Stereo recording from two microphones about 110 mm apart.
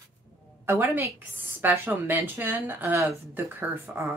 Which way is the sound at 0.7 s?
20° right (ahead or behind).